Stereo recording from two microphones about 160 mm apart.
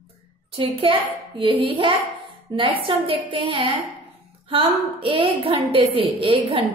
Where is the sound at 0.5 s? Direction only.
35° right (ahead or behind).